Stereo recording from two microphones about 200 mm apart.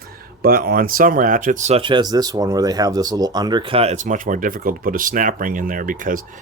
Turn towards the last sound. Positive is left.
turn(degrees=-40)  # may be behind; listen again after turning